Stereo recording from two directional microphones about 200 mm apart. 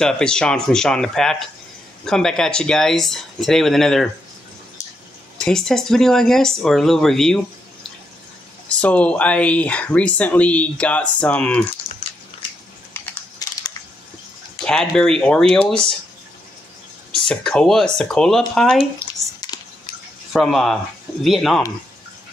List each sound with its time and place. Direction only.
0.0 s speech: 5° left (ahead or behind)
5.4 s speech: centre (ahead or behind)
12.9 s typing: 15° left (ahead or behind)
14.6 s speech: 5° left (ahead or behind)
17.2 s speech: centre (ahead or behind)
19.4 s drip: 20° left (ahead or behind)
20.3 s speech: centre (ahead or behind)